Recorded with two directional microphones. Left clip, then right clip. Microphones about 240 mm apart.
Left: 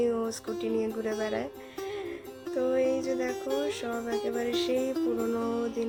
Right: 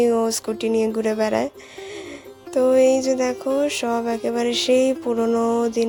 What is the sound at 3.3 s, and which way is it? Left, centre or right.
Speech, centre.